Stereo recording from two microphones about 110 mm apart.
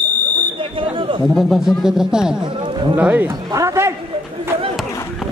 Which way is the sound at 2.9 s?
15° right (ahead or behind).